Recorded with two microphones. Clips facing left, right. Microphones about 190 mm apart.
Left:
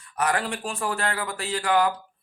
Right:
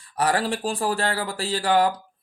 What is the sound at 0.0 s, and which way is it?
Speech, 30° right (ahead or behind).